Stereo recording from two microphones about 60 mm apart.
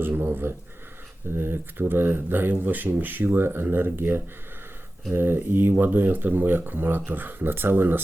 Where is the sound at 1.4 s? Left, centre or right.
Right.